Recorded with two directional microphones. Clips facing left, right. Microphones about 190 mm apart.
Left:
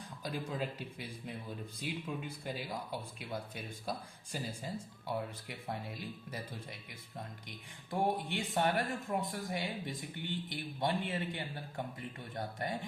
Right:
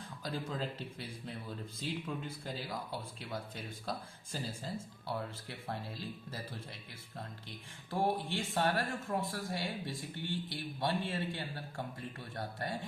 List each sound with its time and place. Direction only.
0.5 s speech: 10° left (ahead or behind)